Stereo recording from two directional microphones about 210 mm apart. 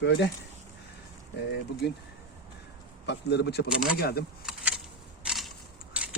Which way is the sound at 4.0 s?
45° left (ahead or behind).